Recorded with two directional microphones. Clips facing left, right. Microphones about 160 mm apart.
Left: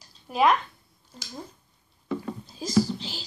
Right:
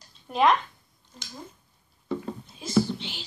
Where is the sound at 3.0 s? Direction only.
35° left (ahead or behind).